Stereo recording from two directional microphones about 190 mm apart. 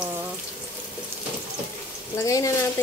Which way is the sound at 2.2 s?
15° left (ahead or behind).